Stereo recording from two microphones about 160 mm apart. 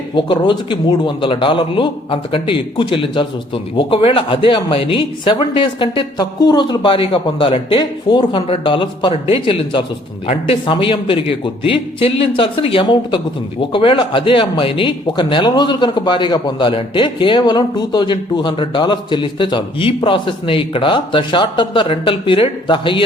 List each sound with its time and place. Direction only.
0.1 s a man's voice: 30° left (ahead or behind)